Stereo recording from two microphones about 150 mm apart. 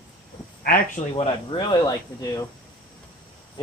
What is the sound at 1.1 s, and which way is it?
Speech, 30° left (ahead or behind).